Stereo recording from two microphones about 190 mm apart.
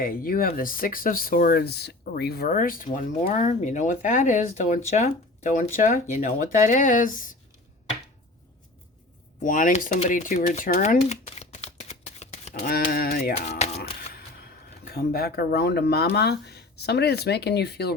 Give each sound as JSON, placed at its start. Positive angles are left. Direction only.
{"t": 0.0, "sound": "speech", "side_deg": 50}
{"t": 9.4, "sound": "speech", "side_deg": 45}
{"t": 12.6, "sound": "speech", "side_deg": 50}
{"t": 13.7, "sound": "a sound", "side_deg": 50}
{"t": 14.9, "sound": "speech", "side_deg": 55}